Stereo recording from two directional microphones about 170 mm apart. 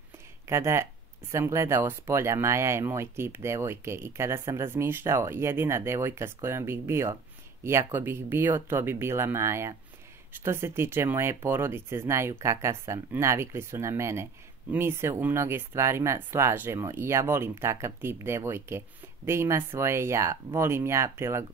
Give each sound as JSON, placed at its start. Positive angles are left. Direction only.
{"t": 0.5, "sound": "speech", "side_deg": -15}